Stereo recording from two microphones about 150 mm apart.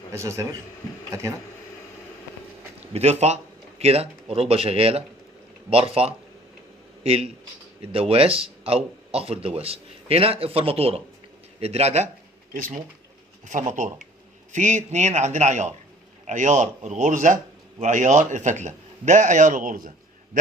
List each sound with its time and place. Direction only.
0.1 s speech: 20° right (ahead or behind)
2.9 s a man's voice: 45° right (ahead or behind)
13.5 s a man's voice: 55° right (ahead or behind)